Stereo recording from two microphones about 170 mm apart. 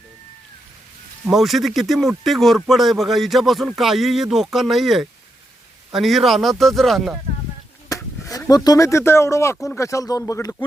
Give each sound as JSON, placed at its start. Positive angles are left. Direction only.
{"t": 1.3, "sound": "speech", "side_deg": 0}
{"t": 7.9, "sound": "speech", "side_deg": 20}